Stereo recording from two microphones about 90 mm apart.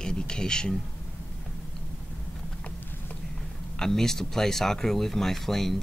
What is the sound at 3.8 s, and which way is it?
Speech, 5° left (ahead or behind).